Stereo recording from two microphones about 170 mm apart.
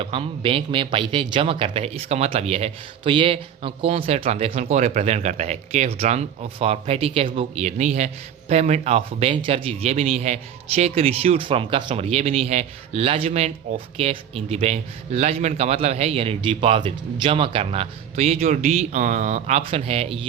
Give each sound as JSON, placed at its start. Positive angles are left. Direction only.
{"t": 0.0, "sound": "a man's voice", "side_deg": -35}